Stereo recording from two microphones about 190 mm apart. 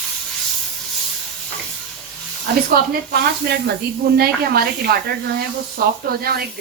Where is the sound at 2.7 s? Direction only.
55° right (ahead or behind).